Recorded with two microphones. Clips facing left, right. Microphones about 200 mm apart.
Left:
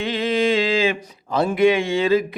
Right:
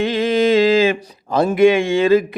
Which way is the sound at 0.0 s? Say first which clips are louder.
Right 4 dB; 45° right (ahead or behind).